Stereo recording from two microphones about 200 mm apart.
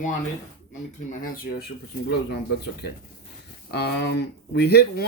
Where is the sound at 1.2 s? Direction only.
45° left (ahead or behind).